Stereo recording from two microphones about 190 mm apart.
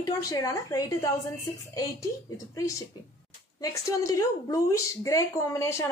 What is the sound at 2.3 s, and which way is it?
Speech, 15° left (ahead or behind).